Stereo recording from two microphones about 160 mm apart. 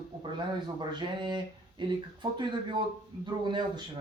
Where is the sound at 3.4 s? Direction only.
30° right (ahead or behind).